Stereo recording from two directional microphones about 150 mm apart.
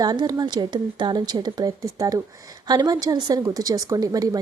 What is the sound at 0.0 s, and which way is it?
A woman's voice, 25° right (ahead or behind).